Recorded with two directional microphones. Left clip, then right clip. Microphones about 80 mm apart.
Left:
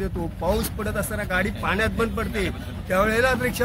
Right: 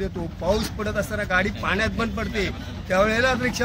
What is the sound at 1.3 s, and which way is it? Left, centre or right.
Speech, left.